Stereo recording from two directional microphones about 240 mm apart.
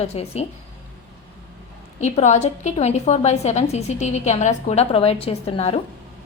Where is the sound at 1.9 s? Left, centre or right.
Left.